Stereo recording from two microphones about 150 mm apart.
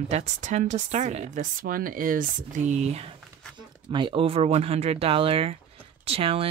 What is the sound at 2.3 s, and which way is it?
Speech, 55° right (ahead or behind).